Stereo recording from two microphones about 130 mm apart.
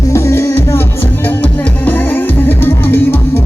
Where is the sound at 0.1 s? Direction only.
20° left (ahead or behind).